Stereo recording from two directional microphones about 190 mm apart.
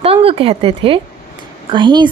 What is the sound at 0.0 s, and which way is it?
A woman's voice, 30° right (ahead or behind).